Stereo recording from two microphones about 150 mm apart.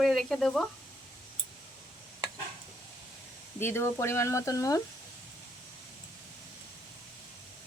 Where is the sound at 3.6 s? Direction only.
15° left (ahead or behind).